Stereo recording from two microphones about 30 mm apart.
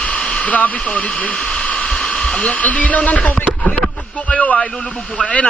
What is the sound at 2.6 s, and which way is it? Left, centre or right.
Speech, left.